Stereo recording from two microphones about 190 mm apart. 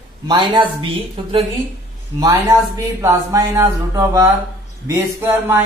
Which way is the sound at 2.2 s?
15° right (ahead or behind).